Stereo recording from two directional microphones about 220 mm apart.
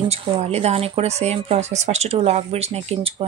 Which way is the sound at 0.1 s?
30° right (ahead or behind).